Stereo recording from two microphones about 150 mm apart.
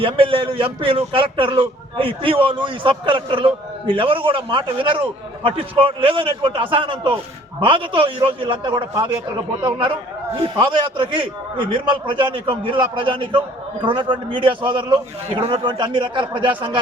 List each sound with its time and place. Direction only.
0.0 s speech: 35° right (ahead or behind)